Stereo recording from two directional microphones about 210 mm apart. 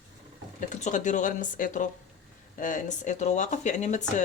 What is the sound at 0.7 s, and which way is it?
Speech, 35° left (ahead or behind).